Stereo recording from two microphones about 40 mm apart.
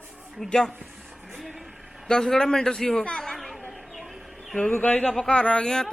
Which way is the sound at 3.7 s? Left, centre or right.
Centre.